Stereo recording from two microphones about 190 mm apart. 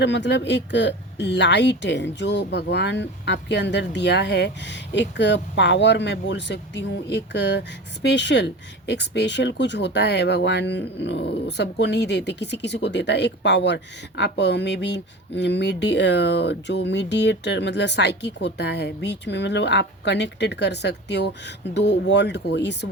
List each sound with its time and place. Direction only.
0.0 s speech: 65° left (ahead or behind)